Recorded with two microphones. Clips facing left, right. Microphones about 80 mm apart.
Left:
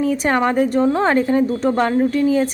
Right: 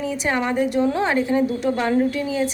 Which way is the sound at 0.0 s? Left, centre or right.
Left.